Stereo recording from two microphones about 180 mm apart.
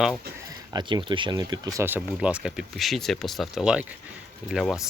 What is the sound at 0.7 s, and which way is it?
Speech, 25° right (ahead or behind).